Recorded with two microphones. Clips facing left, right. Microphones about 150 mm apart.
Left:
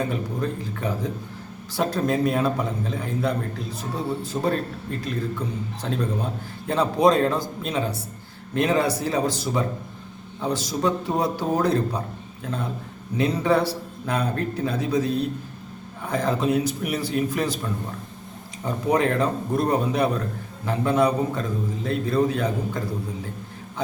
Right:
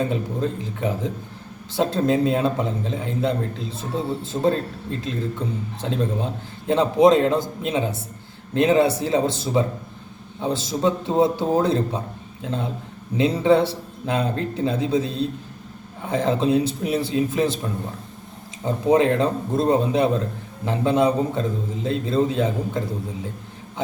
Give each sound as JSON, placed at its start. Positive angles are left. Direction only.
{"t": 0.1, "sound": "a man's voice", "side_deg": -20}
{"t": 18.6, "sound": "a man's voice", "side_deg": -20}